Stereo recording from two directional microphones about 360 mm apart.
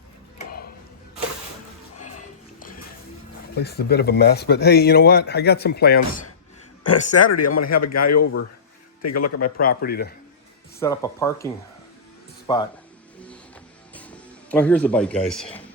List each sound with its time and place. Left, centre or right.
0.3 s a sound: left
2.0 s music: left
3.5 s speech: left
6.8 s a man's voice: left
9.6 s speech: left
10.8 s speech: centre
12.5 s speech: centre
13.1 s music: centre
13.9 s a man's voice: centre